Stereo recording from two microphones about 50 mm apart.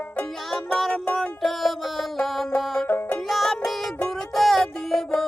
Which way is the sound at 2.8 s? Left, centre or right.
Left.